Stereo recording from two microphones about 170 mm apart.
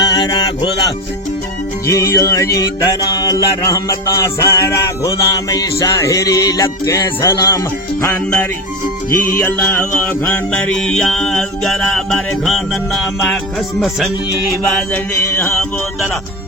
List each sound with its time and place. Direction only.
0.0 s music: 25° left (ahead or behind); by 14.1 s centre (ahead or behind)